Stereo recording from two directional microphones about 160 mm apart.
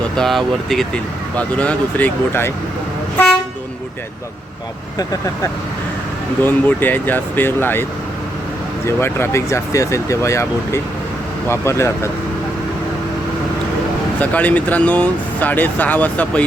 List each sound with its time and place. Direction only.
0.2 s speech: centre (ahead or behind)
6.4 s speech: 10° left (ahead or behind)
9.0 s speech: 15° left (ahead or behind)
14.2 s speech: 10° left (ahead or behind)